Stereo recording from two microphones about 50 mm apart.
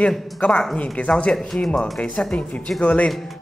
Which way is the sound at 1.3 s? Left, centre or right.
Centre.